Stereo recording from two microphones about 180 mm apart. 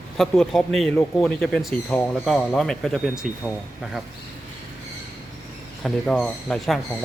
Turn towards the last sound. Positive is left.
turn(degrees=0)  # may be behind; listen again after turning